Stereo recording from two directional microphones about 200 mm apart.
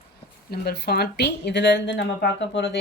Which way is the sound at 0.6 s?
50° left (ahead or behind).